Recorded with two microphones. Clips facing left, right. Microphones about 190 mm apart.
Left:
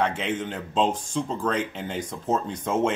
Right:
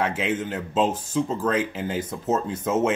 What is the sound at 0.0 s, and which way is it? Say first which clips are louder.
Speech: right 1 dB; 5° right (ahead or behind).